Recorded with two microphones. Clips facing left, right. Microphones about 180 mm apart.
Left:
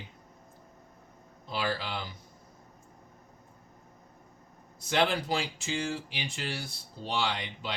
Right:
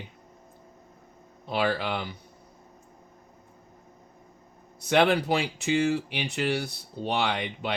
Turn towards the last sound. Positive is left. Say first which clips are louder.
# right 6 dB
turn(degrees=-60)  # may be behind; listen again after turning